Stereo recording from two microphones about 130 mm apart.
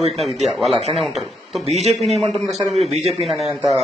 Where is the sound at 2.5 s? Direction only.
55° right (ahead or behind).